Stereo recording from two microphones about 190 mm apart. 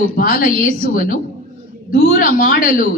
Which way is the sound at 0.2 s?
50° left (ahead or behind).